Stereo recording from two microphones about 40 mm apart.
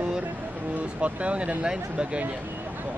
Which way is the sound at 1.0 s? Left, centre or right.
Right.